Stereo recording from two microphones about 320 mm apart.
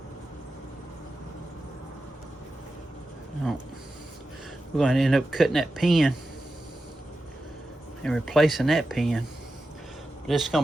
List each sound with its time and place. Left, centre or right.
4.8 s speech: centre
8.0 s speech: centre
10.2 s speech: centre